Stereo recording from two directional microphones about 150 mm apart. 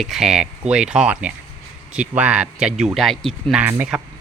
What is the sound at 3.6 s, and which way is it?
Speech, 10° right (ahead or behind).